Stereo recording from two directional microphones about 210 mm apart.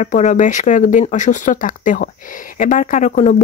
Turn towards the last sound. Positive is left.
turn(degrees=35)  # may be behind; listen again after turning